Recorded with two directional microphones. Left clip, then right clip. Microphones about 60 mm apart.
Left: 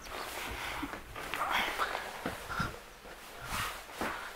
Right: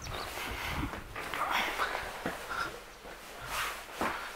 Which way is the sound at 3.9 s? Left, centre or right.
Centre.